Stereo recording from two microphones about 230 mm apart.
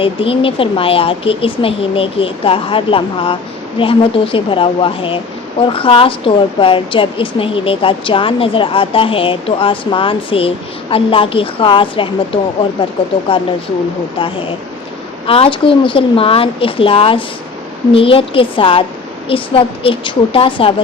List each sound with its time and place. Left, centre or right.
0.0 s a woman's voice: left